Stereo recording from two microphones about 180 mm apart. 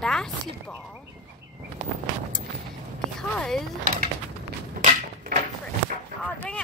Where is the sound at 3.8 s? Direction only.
55° right (ahead or behind).